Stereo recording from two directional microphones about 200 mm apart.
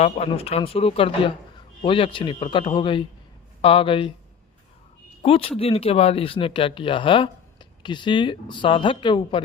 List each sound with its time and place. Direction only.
0.0 s speech: 30° left (ahead or behind)
5.2 s speech: 30° left (ahead or behind)